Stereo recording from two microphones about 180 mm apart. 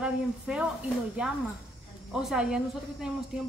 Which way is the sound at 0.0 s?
5° right (ahead or behind).